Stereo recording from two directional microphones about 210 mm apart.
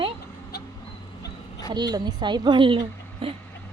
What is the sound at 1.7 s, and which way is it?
A woman's voice, 20° right (ahead or behind).